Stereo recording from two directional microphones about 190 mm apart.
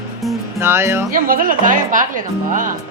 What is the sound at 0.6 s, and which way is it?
Speech, 15° right (ahead or behind).